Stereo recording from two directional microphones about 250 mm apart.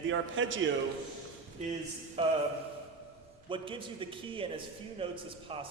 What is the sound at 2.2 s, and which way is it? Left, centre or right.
Speech, right.